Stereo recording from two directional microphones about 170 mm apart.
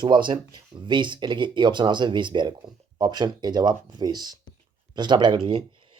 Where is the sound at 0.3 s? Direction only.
25° right (ahead or behind).